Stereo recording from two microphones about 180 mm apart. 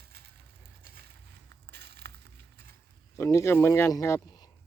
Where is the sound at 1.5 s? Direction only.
65° right (ahead or behind).